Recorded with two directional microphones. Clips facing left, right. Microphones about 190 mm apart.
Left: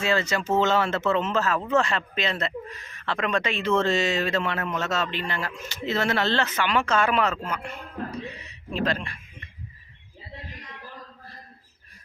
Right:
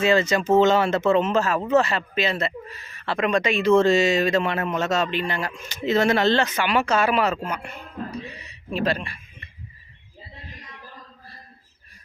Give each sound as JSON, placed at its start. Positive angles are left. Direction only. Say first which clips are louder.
{"t": 0.0, "sound": "speech", "louder": "right 5 dB", "side_deg": -20}